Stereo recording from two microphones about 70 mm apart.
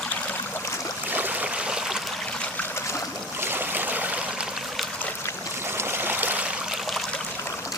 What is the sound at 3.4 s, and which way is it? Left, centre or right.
Stream, right.